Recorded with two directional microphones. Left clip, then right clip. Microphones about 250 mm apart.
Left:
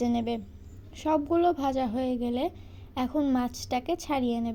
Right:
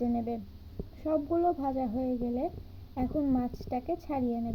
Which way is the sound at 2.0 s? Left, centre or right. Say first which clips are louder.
Left 3 dB; left.